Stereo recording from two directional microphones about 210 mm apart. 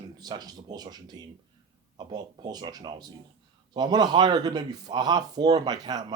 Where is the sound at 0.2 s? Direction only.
20° right (ahead or behind).